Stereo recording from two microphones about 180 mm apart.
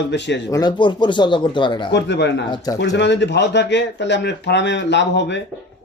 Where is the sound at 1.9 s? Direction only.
75° left (ahead or behind).